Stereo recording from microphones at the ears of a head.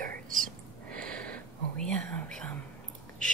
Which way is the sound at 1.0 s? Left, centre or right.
Right.